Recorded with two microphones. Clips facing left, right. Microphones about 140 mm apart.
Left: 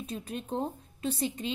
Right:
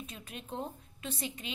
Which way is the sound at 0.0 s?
35° left (ahead or behind).